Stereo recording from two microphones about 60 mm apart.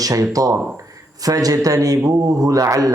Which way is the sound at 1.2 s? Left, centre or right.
Right.